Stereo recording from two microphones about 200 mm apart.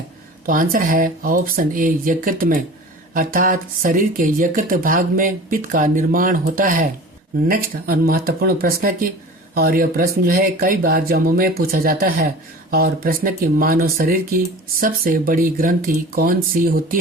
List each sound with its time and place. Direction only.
0.4 s speech: 45° right (ahead or behind)